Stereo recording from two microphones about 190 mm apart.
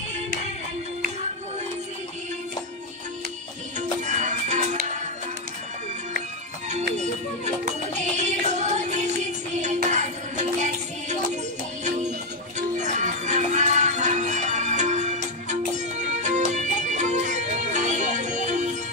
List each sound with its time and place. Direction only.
4.0 s music: 40° right (ahead or behind)
7.0 s music: 35° right (ahead or behind)